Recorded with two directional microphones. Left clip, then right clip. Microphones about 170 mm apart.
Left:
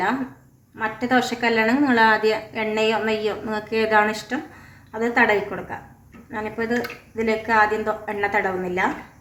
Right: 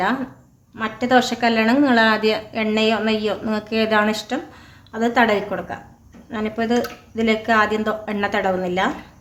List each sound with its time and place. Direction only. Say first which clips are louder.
0.8 s a woman's voice: right 3 dB; 45° right (ahead or behind)